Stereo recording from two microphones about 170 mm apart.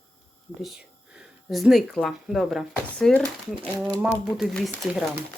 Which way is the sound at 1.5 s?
Centre (ahead or behind).